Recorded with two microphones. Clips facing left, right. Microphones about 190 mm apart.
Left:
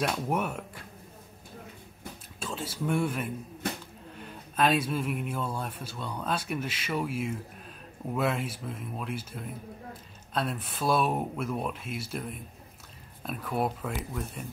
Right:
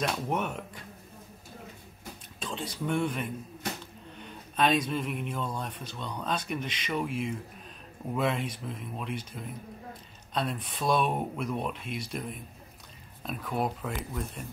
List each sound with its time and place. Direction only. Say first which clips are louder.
0.0 s speech: left 1 dB; 5° left (ahead or behind)
2.4 s speech: left 1 dB; 5° left (ahead or behind)